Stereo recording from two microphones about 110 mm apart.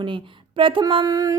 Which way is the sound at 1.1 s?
30° right (ahead or behind).